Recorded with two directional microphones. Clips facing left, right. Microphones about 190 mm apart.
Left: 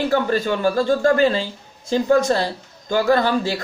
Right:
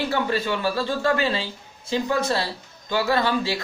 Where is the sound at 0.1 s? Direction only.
45° left (ahead or behind).